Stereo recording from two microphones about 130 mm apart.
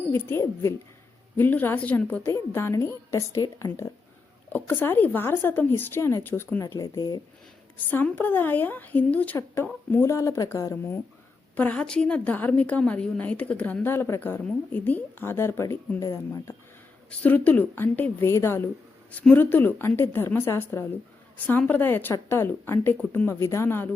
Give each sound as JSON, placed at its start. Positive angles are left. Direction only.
{"t": 0.1, "sound": "a woman's voice", "side_deg": 20}
{"t": 7.8, "sound": "a woman's voice", "side_deg": 15}
{"t": 17.1, "sound": "a woman's voice", "side_deg": 15}